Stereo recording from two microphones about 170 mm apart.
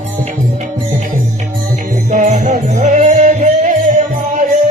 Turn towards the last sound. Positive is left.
turn(degrees=-45)  # may be behind; listen again after turning